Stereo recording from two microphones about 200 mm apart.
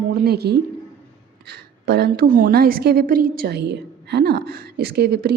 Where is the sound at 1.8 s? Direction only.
55° right (ahead or behind).